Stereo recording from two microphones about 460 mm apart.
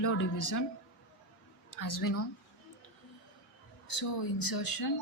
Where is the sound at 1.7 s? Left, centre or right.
Left.